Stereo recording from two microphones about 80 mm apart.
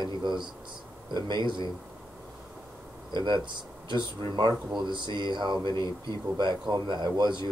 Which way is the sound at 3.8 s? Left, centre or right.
Right.